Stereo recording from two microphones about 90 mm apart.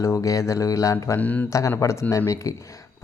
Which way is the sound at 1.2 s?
15° left (ahead or behind).